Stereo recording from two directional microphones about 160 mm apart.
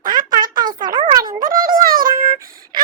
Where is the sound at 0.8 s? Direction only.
30° right (ahead or behind).